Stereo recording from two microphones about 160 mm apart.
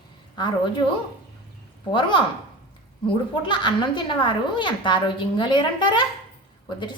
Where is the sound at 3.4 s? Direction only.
30° left (ahead or behind).